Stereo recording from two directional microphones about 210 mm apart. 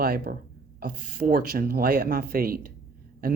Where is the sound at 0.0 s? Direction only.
45° right (ahead or behind).